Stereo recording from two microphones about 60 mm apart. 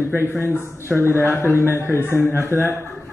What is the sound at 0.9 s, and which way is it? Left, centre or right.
Speech, right.